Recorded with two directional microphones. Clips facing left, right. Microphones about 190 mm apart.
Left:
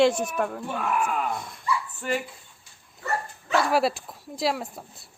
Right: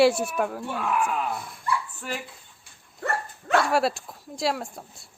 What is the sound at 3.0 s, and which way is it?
Dog, 60° right (ahead or behind).